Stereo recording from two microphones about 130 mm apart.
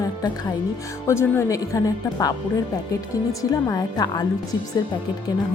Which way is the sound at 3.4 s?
25° left (ahead or behind).